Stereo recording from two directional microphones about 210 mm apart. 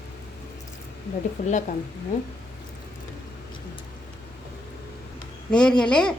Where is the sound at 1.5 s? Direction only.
35° left (ahead or behind).